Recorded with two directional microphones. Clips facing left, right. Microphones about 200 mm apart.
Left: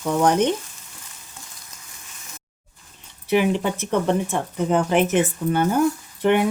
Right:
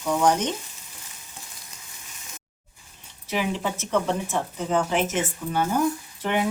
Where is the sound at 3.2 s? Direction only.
60° left (ahead or behind).